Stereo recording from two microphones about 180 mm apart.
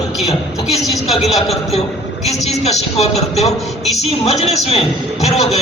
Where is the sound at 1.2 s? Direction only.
35° left (ahead or behind).